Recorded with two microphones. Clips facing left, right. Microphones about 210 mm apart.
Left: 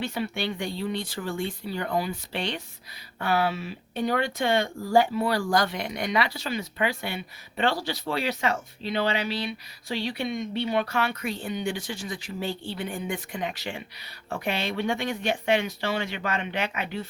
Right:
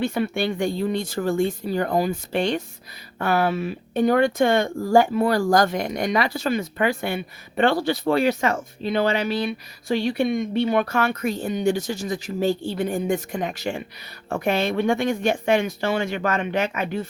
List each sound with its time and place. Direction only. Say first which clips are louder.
0.0 s speech: right 6 dB; 50° right (ahead or behind)